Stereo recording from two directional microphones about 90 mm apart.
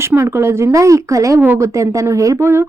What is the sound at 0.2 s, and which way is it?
Speech, 30° right (ahead or behind).